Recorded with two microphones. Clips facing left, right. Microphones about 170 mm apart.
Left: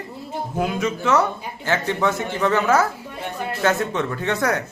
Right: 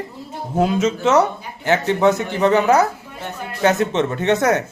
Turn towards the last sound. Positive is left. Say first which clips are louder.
# right 5 dB
turn(degrees=-20)  # may be behind; listen again after turning